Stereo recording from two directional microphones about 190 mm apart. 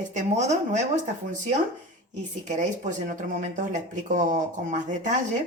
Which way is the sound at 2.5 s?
40° right (ahead or behind).